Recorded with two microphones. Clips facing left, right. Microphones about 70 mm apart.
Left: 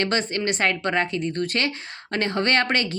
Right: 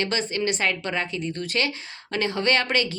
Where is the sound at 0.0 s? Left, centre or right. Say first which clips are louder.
Left 2 dB; left.